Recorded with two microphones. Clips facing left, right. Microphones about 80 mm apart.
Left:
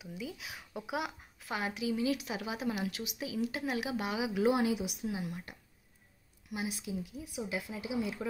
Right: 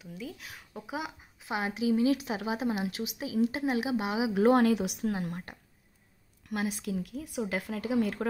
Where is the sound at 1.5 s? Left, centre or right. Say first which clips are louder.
Right 5 dB; right.